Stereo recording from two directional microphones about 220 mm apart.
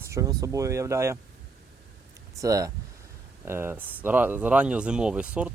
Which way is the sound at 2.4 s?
15° right (ahead or behind).